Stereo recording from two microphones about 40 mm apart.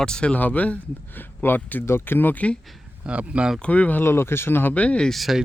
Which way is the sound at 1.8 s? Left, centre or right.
Left.